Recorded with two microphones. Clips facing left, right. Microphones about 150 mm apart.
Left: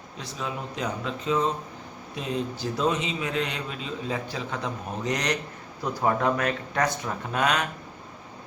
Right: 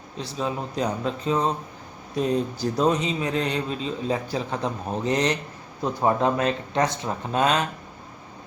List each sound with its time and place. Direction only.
0.2 s a man's voice: 30° right (ahead or behind)